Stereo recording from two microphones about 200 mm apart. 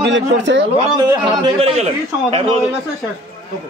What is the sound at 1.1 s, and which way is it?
A man's voice, 25° right (ahead or behind).